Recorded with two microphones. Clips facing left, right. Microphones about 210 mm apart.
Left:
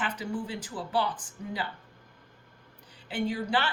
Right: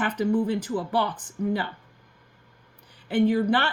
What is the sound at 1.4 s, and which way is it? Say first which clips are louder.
Speech: right 14 dB; 60° right (ahead or behind).